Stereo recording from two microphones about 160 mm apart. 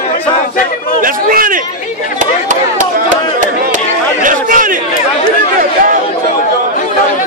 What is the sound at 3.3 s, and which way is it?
Chatter, 55° right (ahead or behind).